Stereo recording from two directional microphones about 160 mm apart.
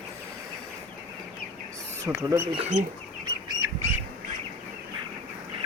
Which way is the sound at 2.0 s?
20° right (ahead or behind).